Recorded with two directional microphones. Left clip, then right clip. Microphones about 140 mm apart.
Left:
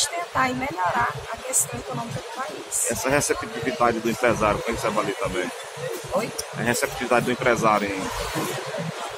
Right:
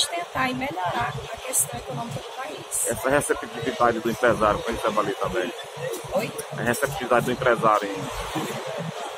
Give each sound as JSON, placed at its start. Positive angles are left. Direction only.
{"t": 0.4, "sound": "speech", "side_deg": 0}
{"t": 3.0, "sound": "speech", "side_deg": 30}
{"t": 6.6, "sound": "speech", "side_deg": 25}